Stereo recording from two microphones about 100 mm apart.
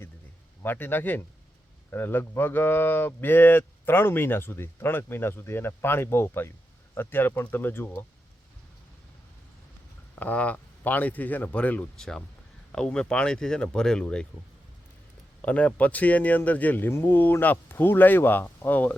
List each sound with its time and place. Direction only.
0.6 s speech: 20° left (ahead or behind)
10.2 s speech: 15° left (ahead or behind)
15.4 s speech: 15° left (ahead or behind)